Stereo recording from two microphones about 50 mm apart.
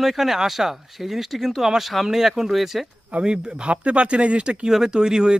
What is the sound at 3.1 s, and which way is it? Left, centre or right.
Speech, centre.